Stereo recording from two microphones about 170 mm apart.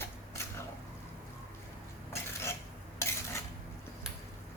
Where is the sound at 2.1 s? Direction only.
15° left (ahead or behind).